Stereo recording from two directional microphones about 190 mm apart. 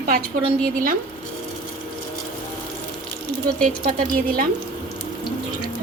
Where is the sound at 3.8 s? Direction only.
45° right (ahead or behind).